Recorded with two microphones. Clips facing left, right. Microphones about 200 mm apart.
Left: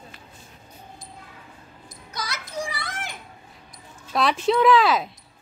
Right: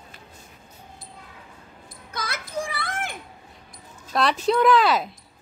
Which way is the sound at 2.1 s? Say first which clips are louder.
Right 2 dB; 55° right (ahead or behind).